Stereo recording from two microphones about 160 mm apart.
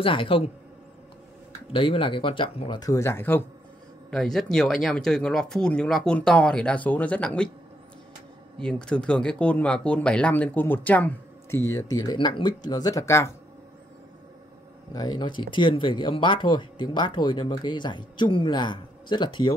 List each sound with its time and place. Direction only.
0.0 s speech: 35° left (ahead or behind)
1.7 s speech: 35° left (ahead or behind); by 3.4 s 15° left (ahead or behind)
4.1 s speech: centre (ahead or behind)
8.5 s speech: 5° left (ahead or behind)
14.9 s speech: 25° left (ahead or behind)